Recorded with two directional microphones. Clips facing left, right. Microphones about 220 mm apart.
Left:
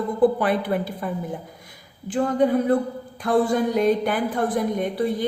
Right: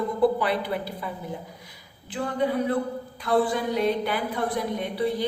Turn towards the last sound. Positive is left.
turn(degrees=50)  # may be behind; listen again after turning